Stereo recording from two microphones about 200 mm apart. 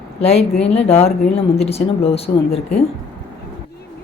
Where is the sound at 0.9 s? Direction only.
30° left (ahead or behind).